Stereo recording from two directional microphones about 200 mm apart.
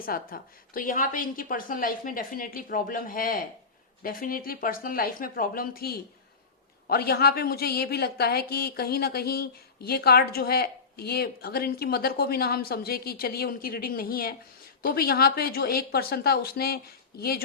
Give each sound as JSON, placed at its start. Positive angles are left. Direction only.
{"t": 0.0, "sound": "a woman's voice", "side_deg": 45}